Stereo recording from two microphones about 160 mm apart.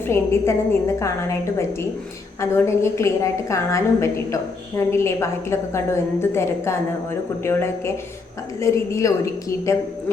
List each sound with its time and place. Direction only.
0.0 s a woman's voice: 15° left (ahead or behind)